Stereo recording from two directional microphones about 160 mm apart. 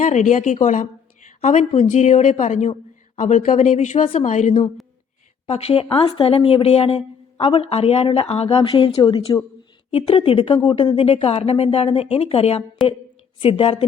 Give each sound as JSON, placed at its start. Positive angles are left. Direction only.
{"t": 0.0, "sound": "a woman's voice", "side_deg": 50}